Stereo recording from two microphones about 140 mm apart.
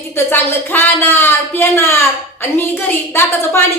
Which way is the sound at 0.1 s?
15° left (ahead or behind).